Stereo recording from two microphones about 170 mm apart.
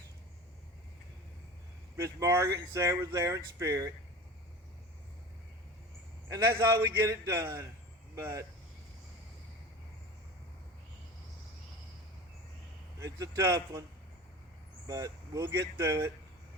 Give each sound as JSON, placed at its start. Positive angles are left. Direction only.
{"t": 2.0, "sound": "speech", "side_deg": -15}
{"t": 6.2, "sound": "a man's voice", "side_deg": -15}
{"t": 13.0, "sound": "speech", "side_deg": -20}
{"t": 14.8, "sound": "speech", "side_deg": -20}